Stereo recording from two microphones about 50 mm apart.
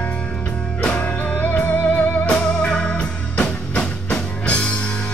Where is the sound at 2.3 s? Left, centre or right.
Centre.